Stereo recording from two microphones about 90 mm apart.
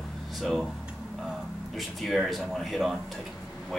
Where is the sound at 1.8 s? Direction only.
Centre (ahead or behind).